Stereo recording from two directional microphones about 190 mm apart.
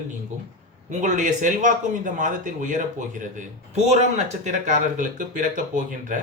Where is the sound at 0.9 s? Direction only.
40° right (ahead or behind).